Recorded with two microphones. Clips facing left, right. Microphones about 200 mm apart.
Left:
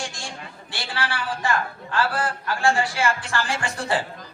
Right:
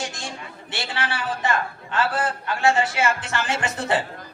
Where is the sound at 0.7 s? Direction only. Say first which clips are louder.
Right 1 dB; 20° right (ahead or behind).